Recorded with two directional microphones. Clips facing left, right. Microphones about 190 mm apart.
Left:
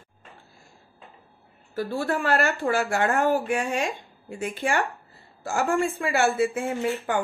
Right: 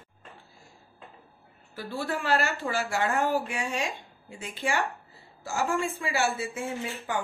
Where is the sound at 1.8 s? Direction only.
45° left (ahead or behind).